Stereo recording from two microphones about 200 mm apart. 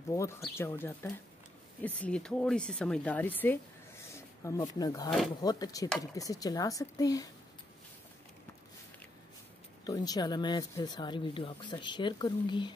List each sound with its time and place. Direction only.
0.1 s speech: 15° left (ahead or behind)
9.8 s speech: 20° left (ahead or behind)